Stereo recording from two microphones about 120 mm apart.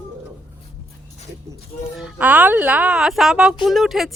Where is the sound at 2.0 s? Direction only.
10° right (ahead or behind).